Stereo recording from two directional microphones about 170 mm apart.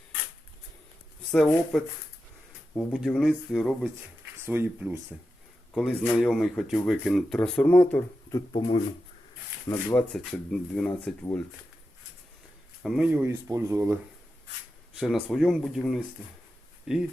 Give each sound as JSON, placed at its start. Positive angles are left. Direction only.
{"t": 2.7, "sound": "speech", "side_deg": 0}
{"t": 4.4, "sound": "speech", "side_deg": -10}
{"t": 5.7, "sound": "speech", "side_deg": 5}
{"t": 8.3, "sound": "speech", "side_deg": 25}
{"t": 10.1, "sound": "speech", "side_deg": 5}
{"t": 12.8, "sound": "speech", "side_deg": -5}
{"t": 14.9, "sound": "speech", "side_deg": 0}